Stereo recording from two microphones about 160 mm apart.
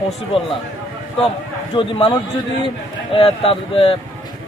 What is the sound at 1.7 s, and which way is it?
A man's voice, 35° left (ahead or behind).